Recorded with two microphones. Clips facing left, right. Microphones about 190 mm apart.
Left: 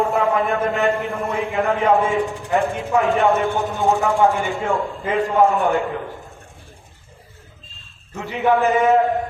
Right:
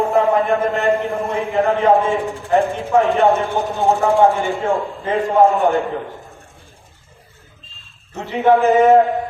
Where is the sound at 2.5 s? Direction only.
35° right (ahead or behind).